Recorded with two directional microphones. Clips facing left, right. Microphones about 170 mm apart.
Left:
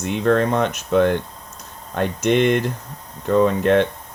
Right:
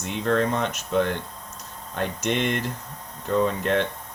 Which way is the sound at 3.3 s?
60° left (ahead or behind).